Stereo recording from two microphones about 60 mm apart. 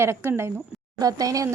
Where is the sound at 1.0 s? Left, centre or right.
Right.